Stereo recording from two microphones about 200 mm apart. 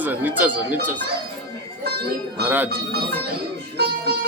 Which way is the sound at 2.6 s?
50° right (ahead or behind).